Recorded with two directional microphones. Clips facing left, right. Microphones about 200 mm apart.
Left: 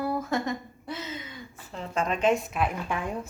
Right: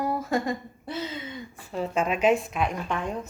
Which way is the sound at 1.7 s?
10° right (ahead or behind).